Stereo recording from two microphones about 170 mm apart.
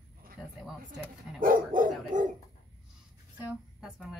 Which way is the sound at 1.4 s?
55° right (ahead or behind).